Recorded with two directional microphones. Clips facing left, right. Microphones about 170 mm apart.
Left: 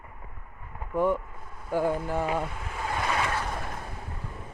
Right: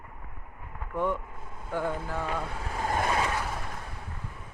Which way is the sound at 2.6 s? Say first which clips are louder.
Right 2 dB; 45° right (ahead or behind).